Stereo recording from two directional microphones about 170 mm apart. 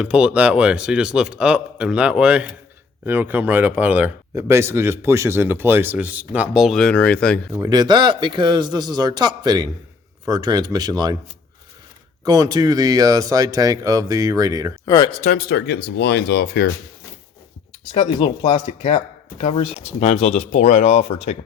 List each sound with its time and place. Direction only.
0.0 s speech: 5° right (ahead or behind)
7.6 s speech: 25° right (ahead or behind)
12.2 s speech: 20° right (ahead or behind)
14.8 s speech: 25° left (ahead or behind)
15.4 s speech: 75° left (ahead or behind)
17.9 s speech: 30° left (ahead or behind)